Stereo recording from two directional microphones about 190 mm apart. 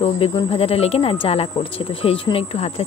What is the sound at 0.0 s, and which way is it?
Speech, 30° left (ahead or behind).